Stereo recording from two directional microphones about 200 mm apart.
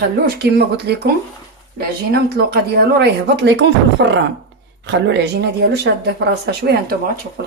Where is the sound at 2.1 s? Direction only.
50° right (ahead or behind).